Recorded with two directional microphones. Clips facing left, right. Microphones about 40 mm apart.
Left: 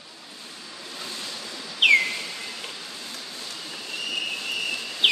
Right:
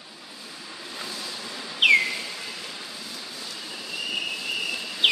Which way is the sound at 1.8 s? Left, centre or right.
Centre.